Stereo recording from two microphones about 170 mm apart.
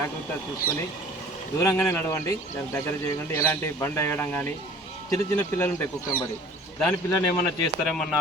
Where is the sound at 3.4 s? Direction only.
15° left (ahead or behind).